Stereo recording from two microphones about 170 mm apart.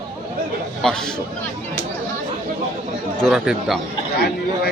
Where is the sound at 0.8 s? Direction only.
5° left (ahead or behind).